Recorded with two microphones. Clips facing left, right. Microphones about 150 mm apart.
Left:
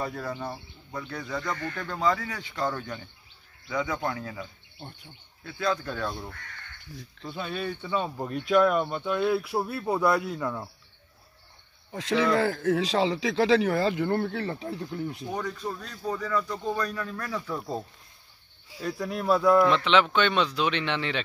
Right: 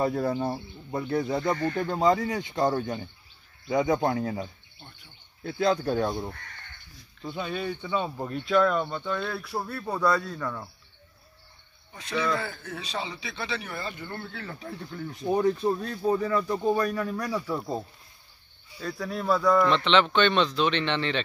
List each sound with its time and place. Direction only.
0.0 s speech: 30° right (ahead or behind)
3.8 s speech: 40° right (ahead or behind)
5.9 s speech: 25° right (ahead or behind)
7.2 s speech: centre (ahead or behind)
11.9 s speech: 90° left
14.1 s speech: 55° left (ahead or behind)
14.4 s speech: 30° left (ahead or behind)
14.7 s speech: 15° left (ahead or behind)
15.2 s speech: 25° right (ahead or behind); by 21.2 s 10° left (ahead or behind)